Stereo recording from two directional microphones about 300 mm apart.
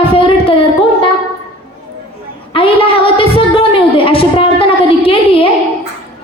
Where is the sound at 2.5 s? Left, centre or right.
Centre.